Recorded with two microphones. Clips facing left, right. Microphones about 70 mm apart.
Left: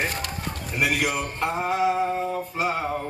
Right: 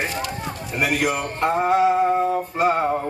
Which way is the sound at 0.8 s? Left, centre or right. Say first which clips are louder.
Right 3 dB; right.